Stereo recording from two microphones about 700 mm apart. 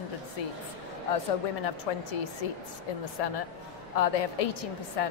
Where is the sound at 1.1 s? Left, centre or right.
Left.